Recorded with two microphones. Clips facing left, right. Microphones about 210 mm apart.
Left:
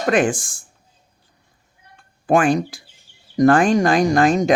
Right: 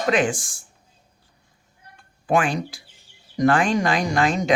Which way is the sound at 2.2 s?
45° left (ahead or behind).